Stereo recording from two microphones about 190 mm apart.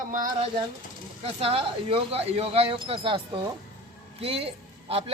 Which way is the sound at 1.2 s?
30° right (ahead or behind).